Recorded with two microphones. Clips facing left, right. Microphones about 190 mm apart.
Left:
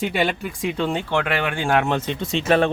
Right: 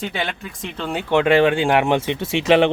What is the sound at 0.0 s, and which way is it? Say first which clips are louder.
Speech: left 4 dB; 5° left (ahead or behind).